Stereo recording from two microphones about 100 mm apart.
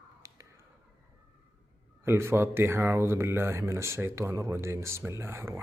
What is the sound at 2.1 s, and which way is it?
A man's voice, 25° right (ahead or behind).